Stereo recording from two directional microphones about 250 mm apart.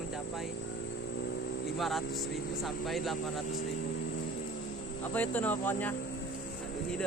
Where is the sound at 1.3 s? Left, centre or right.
Left.